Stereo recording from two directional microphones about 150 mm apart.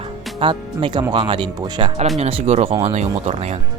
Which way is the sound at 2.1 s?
45° right (ahead or behind).